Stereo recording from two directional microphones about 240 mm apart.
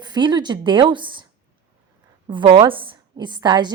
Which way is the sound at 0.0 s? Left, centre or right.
Centre.